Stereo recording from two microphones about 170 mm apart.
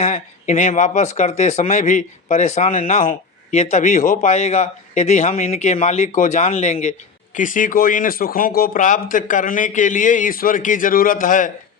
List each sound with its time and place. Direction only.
0.0 s speech: 40° left (ahead or behind)
7.3 s a man's voice: 50° left (ahead or behind)